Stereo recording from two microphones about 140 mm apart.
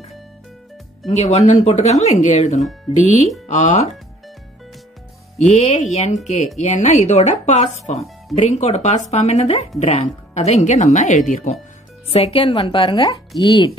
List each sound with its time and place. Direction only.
1.1 s a woman's voice: 50° left (ahead or behind)
5.5 s a woman's voice: 55° left (ahead or behind)
12.1 s a woman's voice: 45° left (ahead or behind)